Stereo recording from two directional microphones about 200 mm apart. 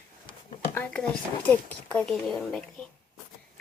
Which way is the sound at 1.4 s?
5° left (ahead or behind).